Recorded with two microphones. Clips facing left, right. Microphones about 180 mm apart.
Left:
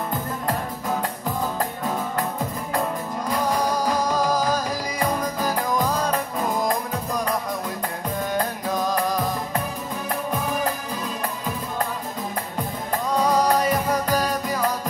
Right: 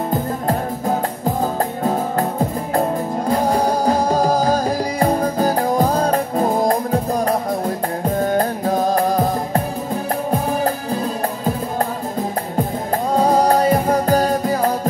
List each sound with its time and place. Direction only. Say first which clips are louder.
0.5 s music: right 6 dB; 30° right (ahead or behind)
13.1 s music: right 5 dB; 30° right (ahead or behind)